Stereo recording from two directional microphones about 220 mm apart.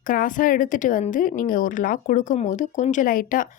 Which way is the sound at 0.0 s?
35° left (ahead or behind).